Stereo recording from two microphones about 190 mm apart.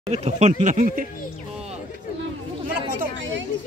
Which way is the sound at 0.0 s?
35° right (ahead or behind).